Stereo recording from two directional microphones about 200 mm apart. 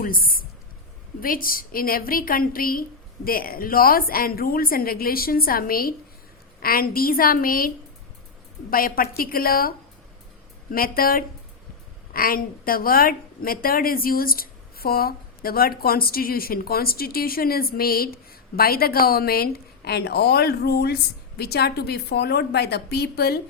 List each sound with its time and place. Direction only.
0.0 s a woman's voice: 45° left (ahead or behind)
8.7 s a woman's voice: 45° left (ahead or behind)